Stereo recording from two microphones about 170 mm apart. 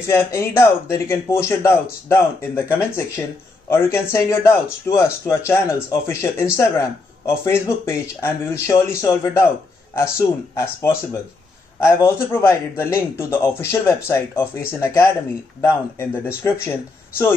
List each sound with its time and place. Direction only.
0.0 s speech: 15° left (ahead or behind)